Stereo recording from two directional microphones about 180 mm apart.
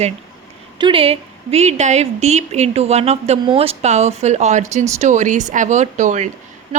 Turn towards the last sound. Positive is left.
turn(degrees=-40)  # may be behind; listen again after turning